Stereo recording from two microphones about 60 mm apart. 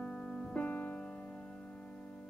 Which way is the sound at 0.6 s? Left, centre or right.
Left.